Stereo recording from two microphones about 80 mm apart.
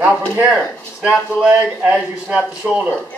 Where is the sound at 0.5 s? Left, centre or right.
Centre.